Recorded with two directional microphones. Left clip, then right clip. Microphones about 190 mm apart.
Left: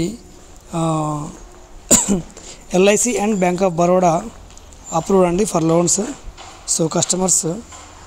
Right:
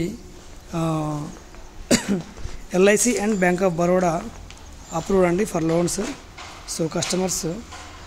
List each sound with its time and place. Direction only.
0.7 s a sound: 15° left (ahead or behind)
1.9 s cough: 30° left (ahead or behind)
2.7 s speech: 20° left (ahead or behind)